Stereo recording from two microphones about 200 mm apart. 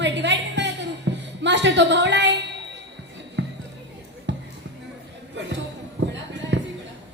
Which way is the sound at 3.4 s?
65° right (ahead or behind).